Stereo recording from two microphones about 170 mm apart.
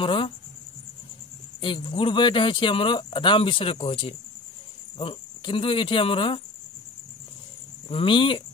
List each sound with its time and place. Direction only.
0.0 s speech: 30° left (ahead or behind)
1.6 s speech: 30° left (ahead or behind)
7.9 s speech: 30° left (ahead or behind)